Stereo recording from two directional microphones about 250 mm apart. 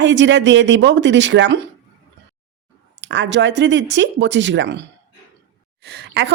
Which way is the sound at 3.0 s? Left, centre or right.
Right.